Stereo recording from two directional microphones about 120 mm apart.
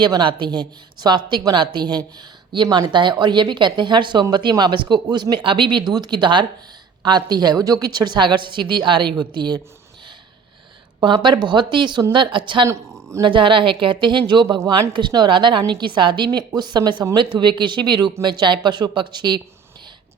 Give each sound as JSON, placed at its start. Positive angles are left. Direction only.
{"t": 0.0, "sound": "speech", "side_deg": -40}
{"t": 11.0, "sound": "a woman's voice", "side_deg": -40}
{"t": 12.6, "sound": "a sound", "side_deg": -25}
{"t": 13.2, "sound": "a woman's voice", "side_deg": -45}